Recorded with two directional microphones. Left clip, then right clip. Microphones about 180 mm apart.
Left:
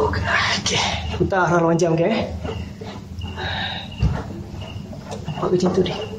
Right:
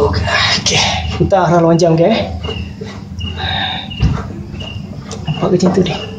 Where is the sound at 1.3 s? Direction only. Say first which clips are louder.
Right 7 dB; 10° right (ahead or behind).